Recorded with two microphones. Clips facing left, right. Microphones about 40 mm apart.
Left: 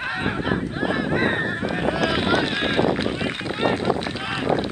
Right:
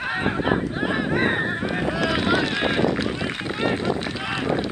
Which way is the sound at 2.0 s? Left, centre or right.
Centre.